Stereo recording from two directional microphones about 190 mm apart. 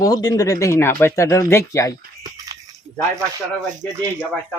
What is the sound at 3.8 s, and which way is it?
Speech, 10° left (ahead or behind).